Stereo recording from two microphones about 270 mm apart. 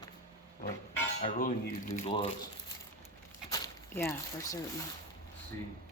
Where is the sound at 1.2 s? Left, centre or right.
Left.